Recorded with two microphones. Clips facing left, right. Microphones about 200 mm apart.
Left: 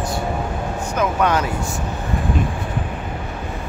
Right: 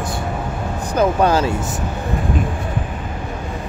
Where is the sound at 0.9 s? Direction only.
30° right (ahead or behind).